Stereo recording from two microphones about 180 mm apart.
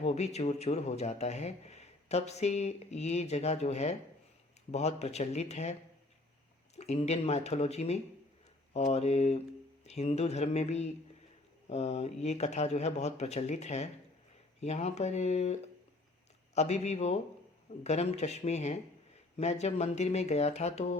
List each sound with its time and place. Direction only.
0.0 s speech: 35° left (ahead or behind)
6.7 s speech: 40° left (ahead or behind)
16.6 s speech: 40° left (ahead or behind)